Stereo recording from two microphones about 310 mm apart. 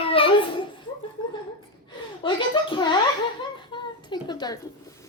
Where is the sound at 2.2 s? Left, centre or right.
Centre.